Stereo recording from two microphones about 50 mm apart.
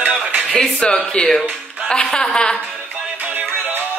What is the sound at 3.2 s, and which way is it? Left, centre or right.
Music, right.